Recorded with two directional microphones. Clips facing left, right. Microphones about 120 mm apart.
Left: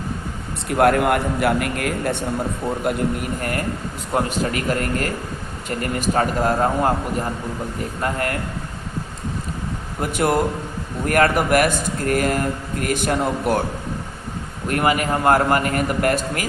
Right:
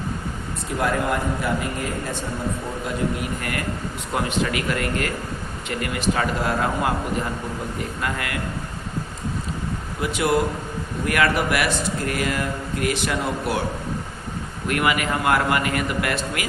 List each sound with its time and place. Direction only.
0.7 s a man's voice: 65° left (ahead or behind)
4.1 s a man's voice: 40° left (ahead or behind)
8.0 s a man's voice: 40° left (ahead or behind)
10.0 s speech: 45° left (ahead or behind)
14.7 s a man's voice: 35° left (ahead or behind)